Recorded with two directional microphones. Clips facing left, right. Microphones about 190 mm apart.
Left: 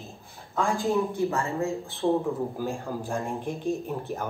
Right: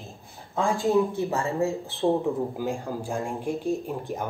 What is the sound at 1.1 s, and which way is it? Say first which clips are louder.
Speech: right 1 dB; 30° right (ahead or behind).